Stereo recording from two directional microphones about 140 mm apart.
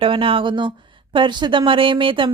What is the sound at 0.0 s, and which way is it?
Speech, 40° right (ahead or behind).